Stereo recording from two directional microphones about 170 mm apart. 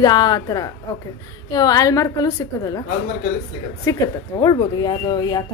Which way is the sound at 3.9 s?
20° left (ahead or behind).